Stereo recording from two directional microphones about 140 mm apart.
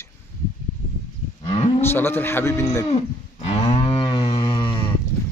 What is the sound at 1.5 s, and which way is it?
Cattle, 40° left (ahead or behind).